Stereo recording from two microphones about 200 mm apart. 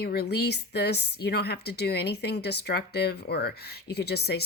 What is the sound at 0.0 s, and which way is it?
A woman's voice, 50° left (ahead or behind).